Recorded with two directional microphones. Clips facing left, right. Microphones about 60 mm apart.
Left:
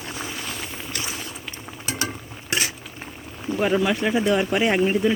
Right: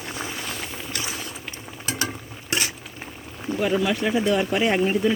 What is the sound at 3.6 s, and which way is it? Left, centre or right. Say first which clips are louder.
Speech: left 1 dB; left.